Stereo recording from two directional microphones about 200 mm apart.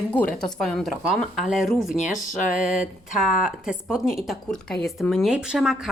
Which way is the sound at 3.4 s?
5° right (ahead or behind).